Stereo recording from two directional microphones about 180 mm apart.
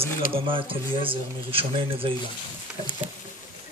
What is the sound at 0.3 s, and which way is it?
Speech, 30° right (ahead or behind).